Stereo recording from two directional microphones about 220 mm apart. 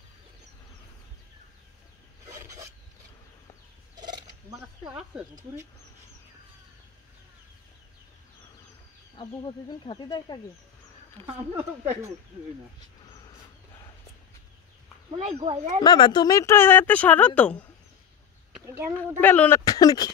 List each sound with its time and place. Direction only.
2.3 s filing: 15° right (ahead or behind)
3.9 s turkey: 20° right (ahead or behind)
4.8 s speech: 5° right (ahead or behind)
9.1 s speech: 20° left (ahead or behind)
11.5 s speech: 30° right (ahead or behind)
15.0 s speech: 25° right (ahead or behind)
15.8 s speech: 20° left (ahead or behind)
18.9 s speech: 10° left (ahead or behind)